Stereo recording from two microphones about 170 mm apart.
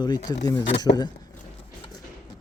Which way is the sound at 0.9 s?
35° left (ahead or behind).